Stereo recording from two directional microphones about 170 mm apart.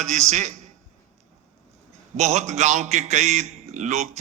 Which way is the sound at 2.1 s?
40° right (ahead or behind).